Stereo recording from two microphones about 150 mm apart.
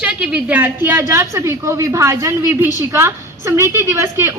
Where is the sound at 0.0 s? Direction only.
5° right (ahead or behind).